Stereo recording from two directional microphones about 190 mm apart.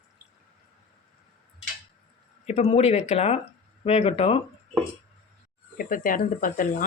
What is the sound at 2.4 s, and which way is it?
Speech, 35° left (ahead or behind).